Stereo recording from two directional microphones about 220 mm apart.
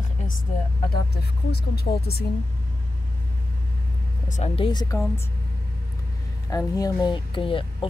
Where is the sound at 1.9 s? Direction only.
35° left (ahead or behind).